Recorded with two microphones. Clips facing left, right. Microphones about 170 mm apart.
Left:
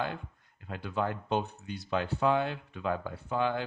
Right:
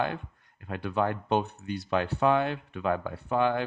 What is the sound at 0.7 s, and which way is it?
Speech, 65° right (ahead or behind).